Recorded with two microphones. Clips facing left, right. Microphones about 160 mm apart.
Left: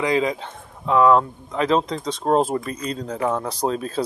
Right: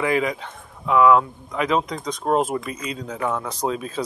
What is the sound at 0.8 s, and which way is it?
Speech, 30° left (ahead or behind).